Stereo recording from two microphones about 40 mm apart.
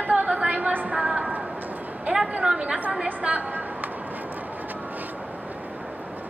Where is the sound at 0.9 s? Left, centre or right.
Centre.